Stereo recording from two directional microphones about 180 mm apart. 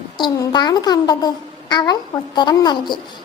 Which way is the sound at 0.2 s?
20° left (ahead or behind).